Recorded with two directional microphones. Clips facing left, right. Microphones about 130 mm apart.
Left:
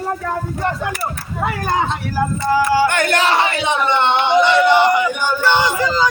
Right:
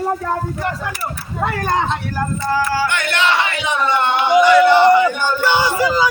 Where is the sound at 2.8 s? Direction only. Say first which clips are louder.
Left 2 dB; 45° left (ahead or behind); by 5.1 s 15° left (ahead or behind).